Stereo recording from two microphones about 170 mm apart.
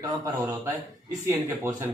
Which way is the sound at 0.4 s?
15° right (ahead or behind).